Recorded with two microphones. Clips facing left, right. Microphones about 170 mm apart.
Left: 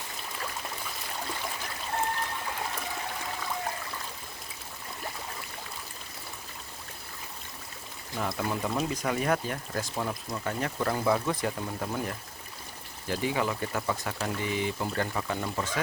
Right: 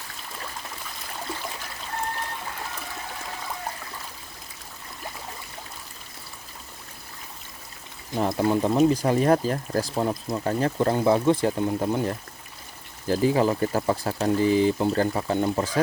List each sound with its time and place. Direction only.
8.1 s speech: 30° right (ahead or behind)